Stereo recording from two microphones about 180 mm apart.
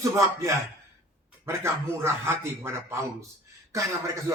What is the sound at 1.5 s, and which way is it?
Speech, 15° right (ahead or behind).